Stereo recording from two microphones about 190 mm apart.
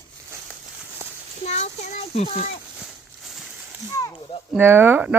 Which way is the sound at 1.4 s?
35° left (ahead or behind).